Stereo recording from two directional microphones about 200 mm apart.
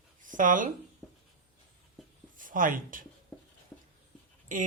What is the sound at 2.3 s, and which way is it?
Speech, 40° right (ahead or behind).